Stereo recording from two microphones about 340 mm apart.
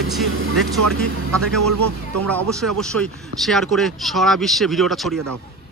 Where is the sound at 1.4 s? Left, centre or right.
Right.